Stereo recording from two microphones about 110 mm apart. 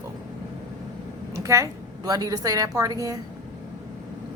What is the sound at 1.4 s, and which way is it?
A woman's voice, 30° right (ahead or behind).